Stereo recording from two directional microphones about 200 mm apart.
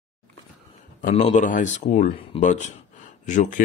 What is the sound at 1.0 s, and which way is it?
Speech, 35° left (ahead or behind).